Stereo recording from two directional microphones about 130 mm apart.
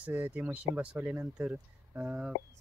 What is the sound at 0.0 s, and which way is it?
Speech, 15° right (ahead or behind).